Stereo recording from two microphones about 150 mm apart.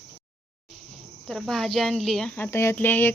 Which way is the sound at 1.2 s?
5° left (ahead or behind).